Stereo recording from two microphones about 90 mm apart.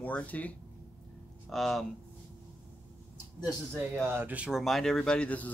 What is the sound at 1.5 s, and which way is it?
Speech, centre (ahead or behind).